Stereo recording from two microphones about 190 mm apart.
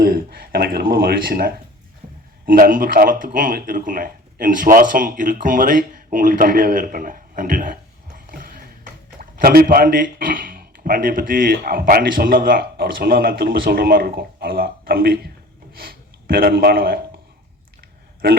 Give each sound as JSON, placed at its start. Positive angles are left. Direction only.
{"t": 0.0, "sound": "speech", "side_deg": -55}